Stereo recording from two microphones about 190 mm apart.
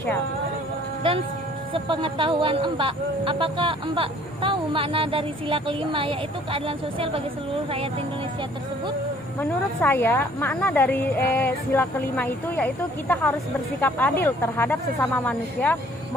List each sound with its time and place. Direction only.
1.7 s speech: 25° right (ahead or behind)
9.4 s a woman's voice: 10° left (ahead or behind)